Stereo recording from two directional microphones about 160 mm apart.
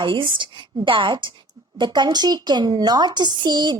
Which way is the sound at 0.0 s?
30° right (ahead or behind).